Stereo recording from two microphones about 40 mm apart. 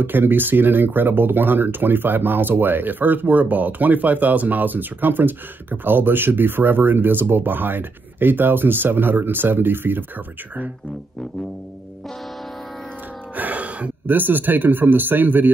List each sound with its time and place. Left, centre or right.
0.0 s speech: right
13.4 s music: right
14.0 s a man's voice: right